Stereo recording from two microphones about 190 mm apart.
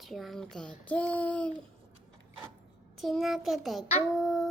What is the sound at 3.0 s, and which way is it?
A woman's voice, centre (ahead or behind).